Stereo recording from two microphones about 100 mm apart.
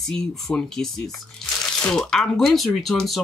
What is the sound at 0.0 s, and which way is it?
Speech, 5° left (ahead or behind).